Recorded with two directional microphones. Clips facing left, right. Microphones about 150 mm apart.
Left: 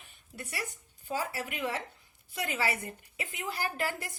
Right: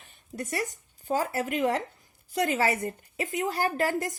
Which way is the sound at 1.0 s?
45° right (ahead or behind).